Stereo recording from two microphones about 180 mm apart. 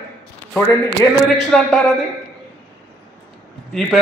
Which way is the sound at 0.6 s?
15° right (ahead or behind).